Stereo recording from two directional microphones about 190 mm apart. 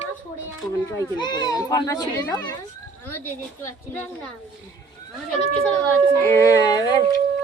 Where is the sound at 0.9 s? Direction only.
20° left (ahead or behind).